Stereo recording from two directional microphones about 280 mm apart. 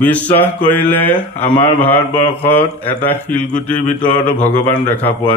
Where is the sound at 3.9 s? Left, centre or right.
Left.